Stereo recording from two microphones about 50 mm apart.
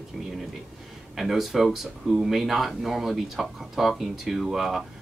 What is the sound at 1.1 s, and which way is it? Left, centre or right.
Speech, centre.